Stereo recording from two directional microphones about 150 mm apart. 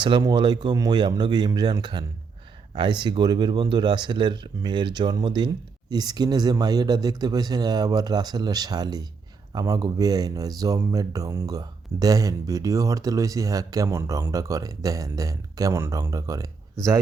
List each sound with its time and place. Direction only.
0.0 s speech: 30° right (ahead or behind)